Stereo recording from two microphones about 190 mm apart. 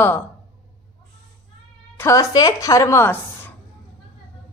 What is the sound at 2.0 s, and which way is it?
A woman's voice, 15° left (ahead or behind).